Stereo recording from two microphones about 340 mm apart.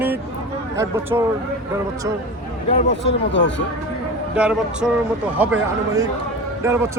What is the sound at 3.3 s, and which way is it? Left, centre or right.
Speech, left.